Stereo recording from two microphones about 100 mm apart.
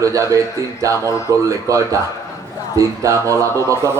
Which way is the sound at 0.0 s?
30° right (ahead or behind).